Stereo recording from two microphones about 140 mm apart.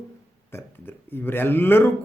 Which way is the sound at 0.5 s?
15° left (ahead or behind).